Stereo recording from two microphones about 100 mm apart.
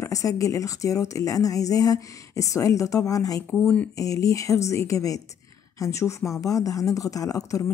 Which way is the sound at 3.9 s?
35° left (ahead or behind).